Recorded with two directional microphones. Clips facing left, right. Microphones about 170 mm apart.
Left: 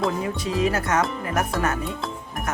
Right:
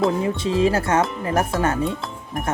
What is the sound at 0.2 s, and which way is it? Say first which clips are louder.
Speech: right 4 dB; 25° right (ahead or behind).